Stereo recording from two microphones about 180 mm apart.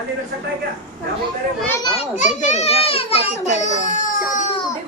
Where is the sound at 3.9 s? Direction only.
45° left (ahead or behind).